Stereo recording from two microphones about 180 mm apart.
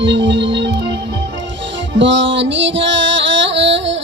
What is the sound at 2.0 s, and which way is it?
Music, 90° right.